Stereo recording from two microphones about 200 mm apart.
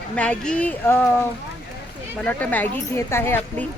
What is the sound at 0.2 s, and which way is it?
Speech, 5° left (ahead or behind).